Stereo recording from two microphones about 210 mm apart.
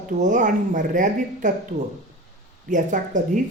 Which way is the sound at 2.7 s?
35° right (ahead or behind).